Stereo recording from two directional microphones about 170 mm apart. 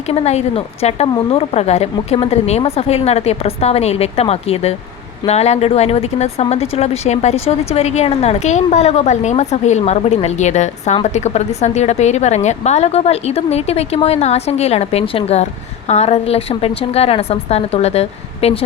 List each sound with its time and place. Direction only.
0.1 s speech: 40° left (ahead or behind)